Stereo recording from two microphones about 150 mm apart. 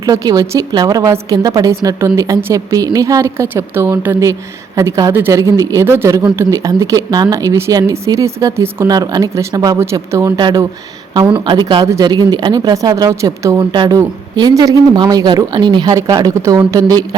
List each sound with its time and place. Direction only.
0.0 s speech: 25° right (ahead or behind)